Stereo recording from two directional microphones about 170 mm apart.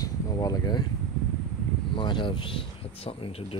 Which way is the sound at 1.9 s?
30° left (ahead or behind).